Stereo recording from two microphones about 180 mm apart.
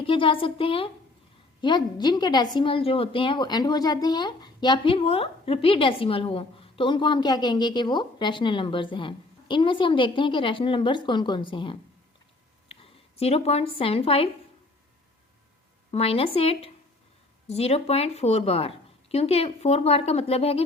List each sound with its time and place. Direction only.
0.0 s a woman's voice: 30° left (ahead or behind)
15.9 s a woman's voice: 35° left (ahead or behind)